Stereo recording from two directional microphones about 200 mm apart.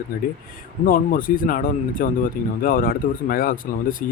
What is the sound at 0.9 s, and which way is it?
Speech, 45° left (ahead or behind).